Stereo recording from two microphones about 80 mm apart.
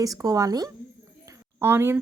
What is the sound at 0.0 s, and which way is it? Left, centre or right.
Speech, right.